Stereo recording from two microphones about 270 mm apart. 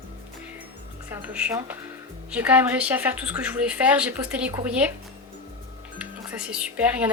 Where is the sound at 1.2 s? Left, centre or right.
Centre.